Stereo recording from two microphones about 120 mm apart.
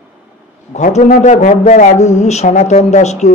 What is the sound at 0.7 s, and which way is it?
A man's voice, 70° left (ahead or behind).